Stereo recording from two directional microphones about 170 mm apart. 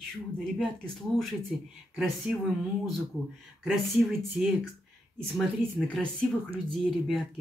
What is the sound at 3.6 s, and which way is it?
Speech, centre (ahead or behind).